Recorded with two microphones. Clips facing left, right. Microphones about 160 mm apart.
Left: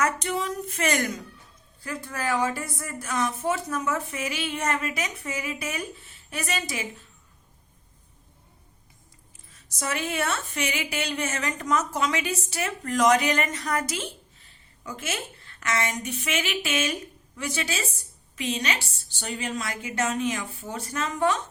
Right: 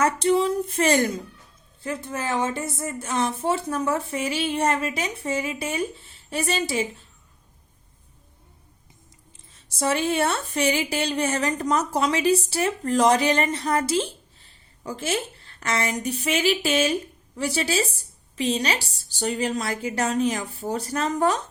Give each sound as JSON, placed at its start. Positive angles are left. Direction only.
{"t": 0.0, "sound": "a woman's voice", "side_deg": -30}
{"t": 9.5, "sound": "a woman's voice", "side_deg": -30}